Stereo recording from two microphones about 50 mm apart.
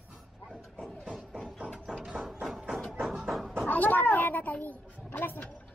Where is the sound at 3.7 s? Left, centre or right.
Left.